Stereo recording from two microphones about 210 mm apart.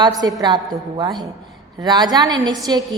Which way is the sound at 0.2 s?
15° right (ahead or behind).